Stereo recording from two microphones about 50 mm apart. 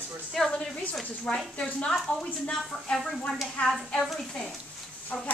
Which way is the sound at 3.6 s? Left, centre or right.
Left.